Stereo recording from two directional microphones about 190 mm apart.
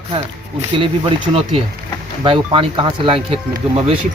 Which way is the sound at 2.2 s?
30° right (ahead or behind).